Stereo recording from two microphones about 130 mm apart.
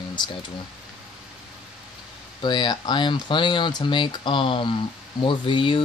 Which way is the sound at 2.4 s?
35° left (ahead or behind).